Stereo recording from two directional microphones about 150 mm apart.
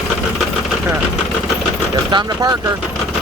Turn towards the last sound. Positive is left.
turn(degrees=-25)  # may be behind; listen again after turning